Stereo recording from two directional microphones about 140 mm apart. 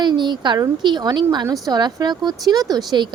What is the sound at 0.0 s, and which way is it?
A woman's voice, 30° right (ahead or behind).